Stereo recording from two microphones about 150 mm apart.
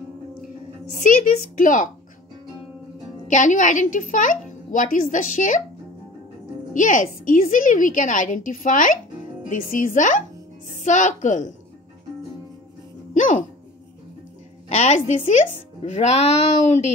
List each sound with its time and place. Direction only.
1.0 s a woman's voice: 60° left (ahead or behind)
3.3 s a woman's voice: 55° left (ahead or behind)
6.7 s a woman's voice: 60° left (ahead or behind)
13.1 s music: 60° left (ahead or behind)
14.7 s a woman's voice: 50° left (ahead or behind)